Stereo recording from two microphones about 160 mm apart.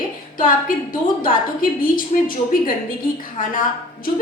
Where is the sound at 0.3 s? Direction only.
60° left (ahead or behind).